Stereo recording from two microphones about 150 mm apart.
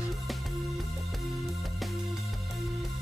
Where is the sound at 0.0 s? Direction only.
Centre (ahead or behind).